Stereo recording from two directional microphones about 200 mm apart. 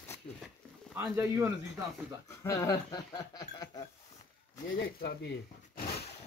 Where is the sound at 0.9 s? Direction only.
10° right (ahead or behind).